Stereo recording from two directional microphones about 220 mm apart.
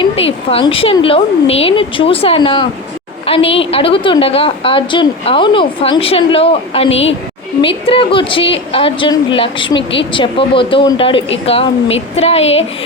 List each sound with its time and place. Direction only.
0.0 s a woman's voice: 25° left (ahead or behind)